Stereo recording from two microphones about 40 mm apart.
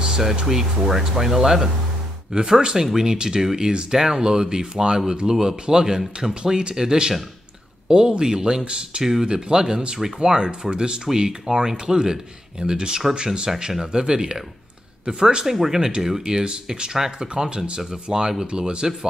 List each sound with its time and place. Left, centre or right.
0.0 s a sound: centre
0.5 s speech: centre; by 9.0 s right
9.0 s speech: centre
16.4 s speech: right